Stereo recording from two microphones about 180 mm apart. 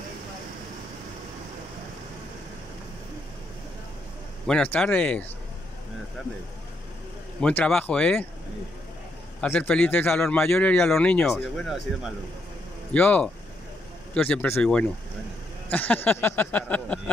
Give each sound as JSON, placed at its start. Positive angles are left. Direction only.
{"t": 4.5, "sound": "a man's voice", "side_deg": 5}
{"t": 7.3, "sound": "a man's voice", "side_deg": 5}
{"t": 9.4, "sound": "a man's voice", "side_deg": 5}